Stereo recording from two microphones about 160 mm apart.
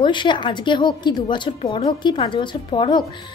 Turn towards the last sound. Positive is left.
turn(degrees=30)  # may be behind; listen again after turning